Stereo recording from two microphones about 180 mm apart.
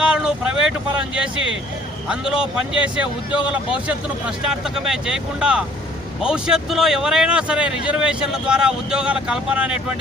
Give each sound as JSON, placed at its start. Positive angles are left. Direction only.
{"t": 0.0, "sound": "vehicle", "side_deg": -5}
{"t": 2.0, "sound": "speech", "side_deg": -5}